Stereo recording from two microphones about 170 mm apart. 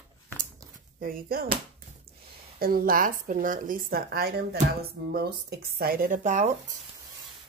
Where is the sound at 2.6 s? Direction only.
60° right (ahead or behind); by 6.6 s 45° right (ahead or behind).